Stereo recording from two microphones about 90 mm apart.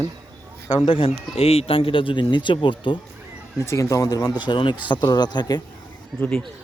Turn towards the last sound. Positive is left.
turn(degrees=-5)  # may be behind; listen again after turning